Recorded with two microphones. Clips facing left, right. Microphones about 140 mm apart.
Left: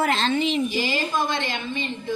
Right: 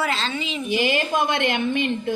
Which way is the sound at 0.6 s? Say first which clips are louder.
Right 3 dB; 65° right (ahead or behind).